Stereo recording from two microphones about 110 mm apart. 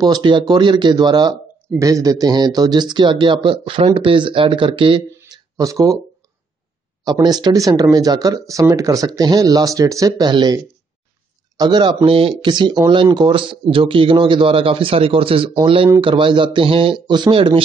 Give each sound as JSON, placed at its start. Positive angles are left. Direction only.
{"t": 0.0, "sound": "speech", "side_deg": -45}
{"t": 5.3, "sound": "a sound", "side_deg": -30}
{"t": 7.1, "sound": "speech", "side_deg": -35}